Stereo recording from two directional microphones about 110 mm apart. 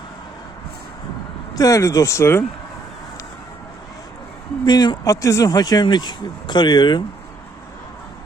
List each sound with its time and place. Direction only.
1.5 s speech: 30° left (ahead or behind)
4.6 s speech: 40° left (ahead or behind)